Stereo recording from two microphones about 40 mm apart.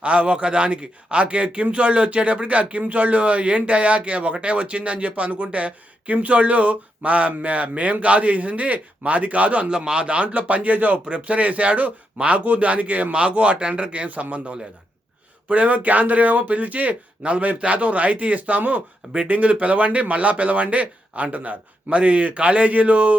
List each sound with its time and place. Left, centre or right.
0.0 s a man's voice: right
9.7 s speech: right